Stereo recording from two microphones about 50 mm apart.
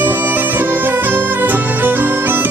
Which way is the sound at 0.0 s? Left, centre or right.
Right.